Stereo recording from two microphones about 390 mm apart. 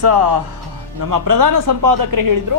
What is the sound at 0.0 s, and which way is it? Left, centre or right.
Speech, right.